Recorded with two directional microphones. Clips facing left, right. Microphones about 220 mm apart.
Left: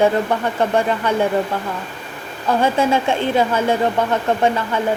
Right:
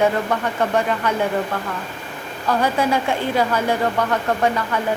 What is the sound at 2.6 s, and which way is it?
Speech, 25° left (ahead or behind).